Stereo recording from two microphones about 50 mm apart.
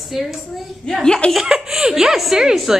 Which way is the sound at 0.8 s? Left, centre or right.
Centre.